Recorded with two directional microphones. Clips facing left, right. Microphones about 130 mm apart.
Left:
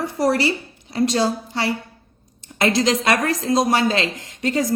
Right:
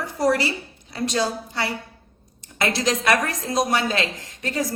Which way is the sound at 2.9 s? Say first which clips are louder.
Left 2 dB; 25° left (ahead or behind).